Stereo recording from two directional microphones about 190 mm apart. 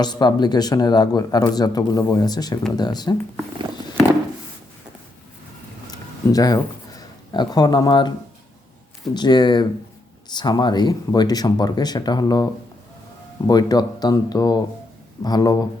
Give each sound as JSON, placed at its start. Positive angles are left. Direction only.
{"t": 0.0, "sound": "speech", "side_deg": 20}
{"t": 5.9, "sound": "a sound", "side_deg": 20}
{"t": 9.1, "sound": "speech", "side_deg": 20}
{"t": 13.5, "sound": "speech", "side_deg": 20}